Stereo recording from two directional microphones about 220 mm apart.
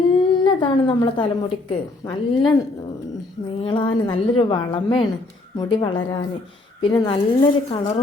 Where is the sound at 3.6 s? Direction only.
25° left (ahead or behind).